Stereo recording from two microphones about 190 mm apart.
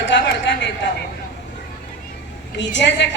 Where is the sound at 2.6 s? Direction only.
70° left (ahead or behind).